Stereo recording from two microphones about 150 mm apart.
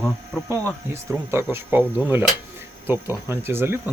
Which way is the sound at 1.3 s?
15° right (ahead or behind).